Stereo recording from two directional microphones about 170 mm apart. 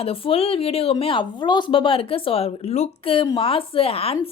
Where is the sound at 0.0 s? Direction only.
35° left (ahead or behind).